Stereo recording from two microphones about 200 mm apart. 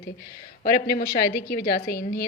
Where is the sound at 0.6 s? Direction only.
45° left (ahead or behind).